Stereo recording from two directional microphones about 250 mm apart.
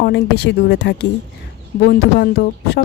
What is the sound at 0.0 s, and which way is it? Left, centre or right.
Speech, left.